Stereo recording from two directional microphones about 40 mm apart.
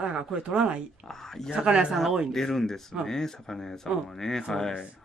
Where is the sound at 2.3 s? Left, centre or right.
Centre.